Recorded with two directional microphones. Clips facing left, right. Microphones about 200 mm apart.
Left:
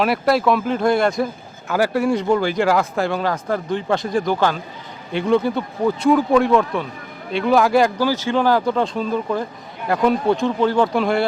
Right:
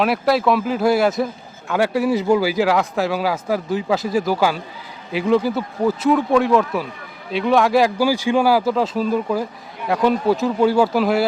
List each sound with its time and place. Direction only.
0.0 s a man's voice: centre (ahead or behind)
7.9 s a man's voice: 10° right (ahead or behind)